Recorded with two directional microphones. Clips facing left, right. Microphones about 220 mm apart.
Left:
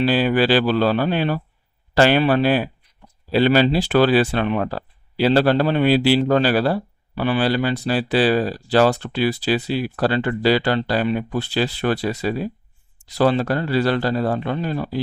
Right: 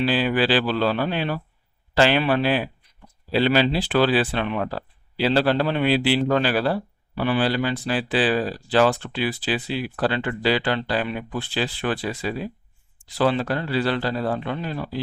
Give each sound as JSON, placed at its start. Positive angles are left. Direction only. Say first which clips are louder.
{"t": 0.0, "sound": "speech", "louder": "left 4 dB", "side_deg": 45}